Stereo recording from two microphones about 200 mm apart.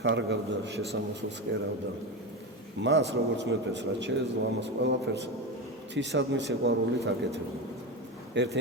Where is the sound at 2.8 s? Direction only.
60° right (ahead or behind).